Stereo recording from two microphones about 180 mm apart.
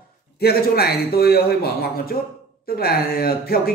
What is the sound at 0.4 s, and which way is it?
A man's voice, 60° left (ahead or behind).